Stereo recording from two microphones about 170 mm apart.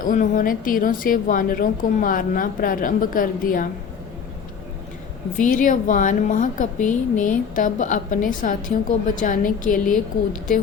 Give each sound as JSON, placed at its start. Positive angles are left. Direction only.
{"t": 0.0, "sound": "a woman's voice", "side_deg": 55}
{"t": 5.4, "sound": "a woman's voice", "side_deg": 50}